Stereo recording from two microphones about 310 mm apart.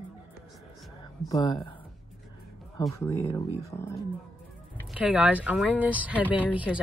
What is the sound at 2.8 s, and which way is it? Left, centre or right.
Speech, centre.